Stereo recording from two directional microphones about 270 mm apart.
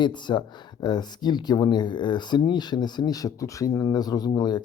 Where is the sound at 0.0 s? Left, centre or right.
Centre.